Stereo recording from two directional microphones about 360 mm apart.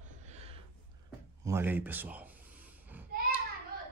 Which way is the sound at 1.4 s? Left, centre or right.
Centre.